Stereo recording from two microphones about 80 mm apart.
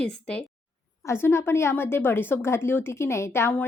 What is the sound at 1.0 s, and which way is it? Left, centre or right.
A woman's voice, left.